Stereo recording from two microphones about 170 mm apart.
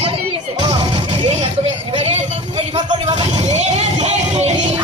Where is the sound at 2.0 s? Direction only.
40° right (ahead or behind).